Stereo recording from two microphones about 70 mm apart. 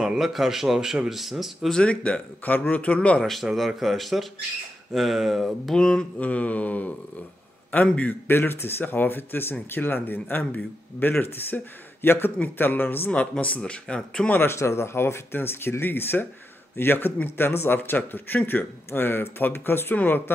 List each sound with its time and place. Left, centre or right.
0.0 s speech: centre
1.7 s speech: centre
3.2 s speech: centre
5.8 s speech: centre
6.2 s speech: left
13.1 s speech: centre
14.3 s speech: left